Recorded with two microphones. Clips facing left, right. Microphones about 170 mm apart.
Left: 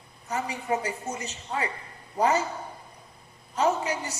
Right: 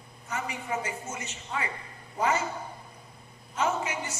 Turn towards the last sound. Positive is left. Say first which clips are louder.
# left 4 dB
turn(degrees=35)  # may be behind; listen again after turning